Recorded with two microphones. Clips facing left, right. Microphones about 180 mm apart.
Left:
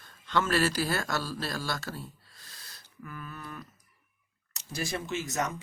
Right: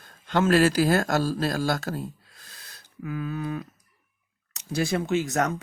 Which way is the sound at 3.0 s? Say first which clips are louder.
Right 12 dB; 90° right.